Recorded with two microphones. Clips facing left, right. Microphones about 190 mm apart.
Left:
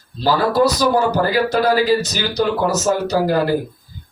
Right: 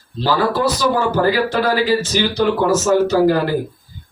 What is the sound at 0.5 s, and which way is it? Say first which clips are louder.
Speech: left 2 dB; 40° left (ahead or behind).